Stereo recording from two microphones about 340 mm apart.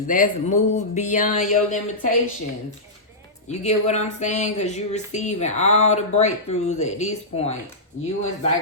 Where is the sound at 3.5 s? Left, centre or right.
Centre.